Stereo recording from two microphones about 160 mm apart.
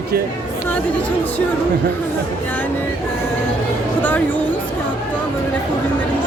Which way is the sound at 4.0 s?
10° left (ahead or behind).